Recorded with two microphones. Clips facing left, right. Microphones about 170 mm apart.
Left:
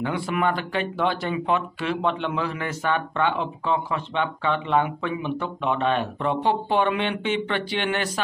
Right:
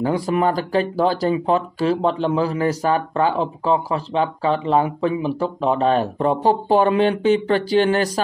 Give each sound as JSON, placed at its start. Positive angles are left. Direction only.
{"t": 0.0, "sound": "speech", "side_deg": -35}